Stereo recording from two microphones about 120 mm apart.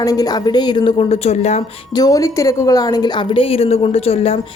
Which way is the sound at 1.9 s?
30° left (ahead or behind).